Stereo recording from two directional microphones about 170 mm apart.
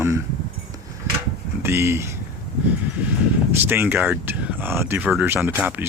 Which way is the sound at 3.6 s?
10° right (ahead or behind).